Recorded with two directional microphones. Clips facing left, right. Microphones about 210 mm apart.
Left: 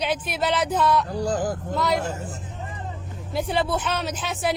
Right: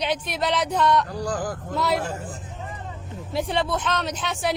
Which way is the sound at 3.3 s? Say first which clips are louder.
Left 1 dB; centre (ahead or behind).